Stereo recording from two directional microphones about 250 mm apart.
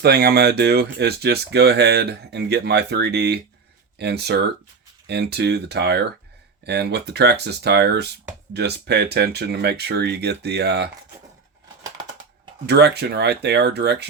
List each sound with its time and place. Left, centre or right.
0.0 s speech: right
12.6 s speech: right